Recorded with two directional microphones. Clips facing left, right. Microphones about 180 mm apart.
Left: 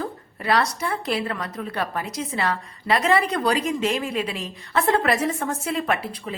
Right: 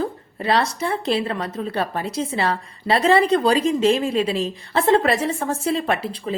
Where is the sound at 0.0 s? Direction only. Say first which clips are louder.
Right 5 dB; 25° right (ahead or behind).